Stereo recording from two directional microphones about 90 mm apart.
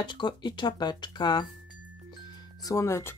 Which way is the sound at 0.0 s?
60° left (ahead or behind).